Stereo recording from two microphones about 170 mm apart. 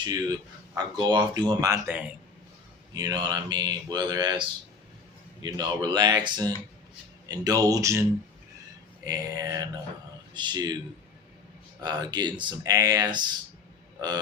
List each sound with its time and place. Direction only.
0.0 s speech: 20° right (ahead or behind)
1.9 s a man's voice: 5° right (ahead or behind)
2.9 s speech: 25° right (ahead or behind)
9.0 s speech: 20° right (ahead or behind)
11.8 s speech: 25° right (ahead or behind)